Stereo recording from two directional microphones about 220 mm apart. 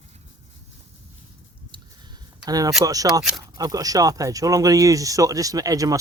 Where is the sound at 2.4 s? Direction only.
15° right (ahead or behind).